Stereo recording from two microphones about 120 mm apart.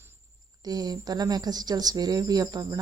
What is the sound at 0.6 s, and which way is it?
A woman's voice, 35° right (ahead or behind).